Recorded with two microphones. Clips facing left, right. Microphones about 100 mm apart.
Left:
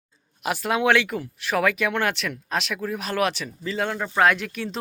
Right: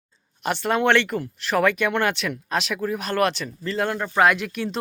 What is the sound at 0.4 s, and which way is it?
Speech, 5° left (ahead or behind).